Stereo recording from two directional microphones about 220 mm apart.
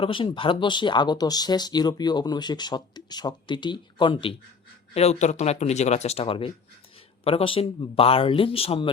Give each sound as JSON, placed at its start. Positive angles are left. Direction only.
{"t": 0.0, "sound": "speech", "side_deg": 25}